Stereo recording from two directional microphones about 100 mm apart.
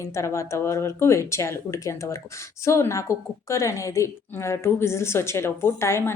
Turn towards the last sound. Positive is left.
turn(degrees=25)  # may be behind; listen again after turning